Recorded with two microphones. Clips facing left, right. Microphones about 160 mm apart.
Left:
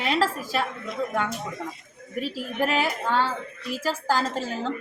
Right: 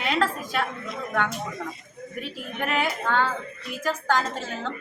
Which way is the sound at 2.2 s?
30° left (ahead or behind).